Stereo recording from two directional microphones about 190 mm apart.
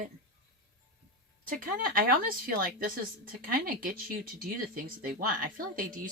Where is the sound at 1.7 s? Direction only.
45° right (ahead or behind).